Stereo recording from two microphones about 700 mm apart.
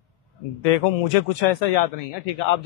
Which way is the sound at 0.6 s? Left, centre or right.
Left.